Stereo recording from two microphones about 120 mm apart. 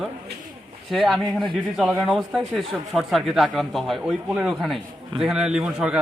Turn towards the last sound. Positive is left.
turn(degrees=-5)  # may be behind; listen again after turning